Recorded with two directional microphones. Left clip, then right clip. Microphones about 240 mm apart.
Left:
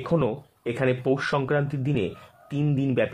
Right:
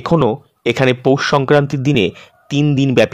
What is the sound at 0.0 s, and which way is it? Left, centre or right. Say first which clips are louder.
Speech: right 10 dB; right.